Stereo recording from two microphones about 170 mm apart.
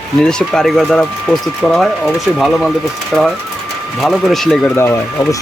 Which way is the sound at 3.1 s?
5° right (ahead or behind).